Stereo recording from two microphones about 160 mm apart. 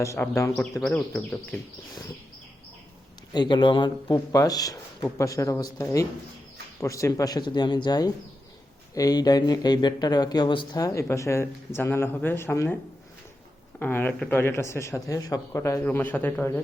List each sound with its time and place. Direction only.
0.2 s speech: 5° left (ahead or behind)
3.3 s speech: 30° left (ahead or behind)
13.7 s speech: 10° left (ahead or behind)